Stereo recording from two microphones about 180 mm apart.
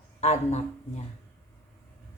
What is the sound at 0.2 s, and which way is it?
Speech, 40° left (ahead or behind).